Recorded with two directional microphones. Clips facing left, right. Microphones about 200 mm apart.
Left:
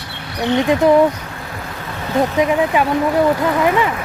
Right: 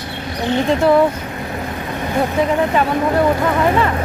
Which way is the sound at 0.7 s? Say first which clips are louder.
Left 1 dB; 15° left (ahead or behind).